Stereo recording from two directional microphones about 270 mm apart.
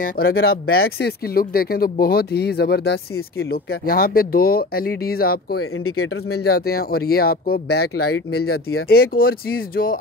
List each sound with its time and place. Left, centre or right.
0.0 s speech: left
5.6 s speech: left
6.4 s speech: left